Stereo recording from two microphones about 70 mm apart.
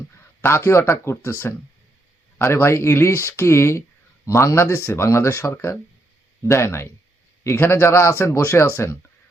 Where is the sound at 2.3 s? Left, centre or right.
Left.